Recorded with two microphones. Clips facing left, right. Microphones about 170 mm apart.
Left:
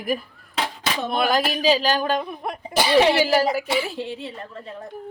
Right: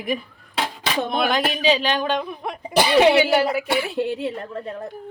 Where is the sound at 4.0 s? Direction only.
55° right (ahead or behind).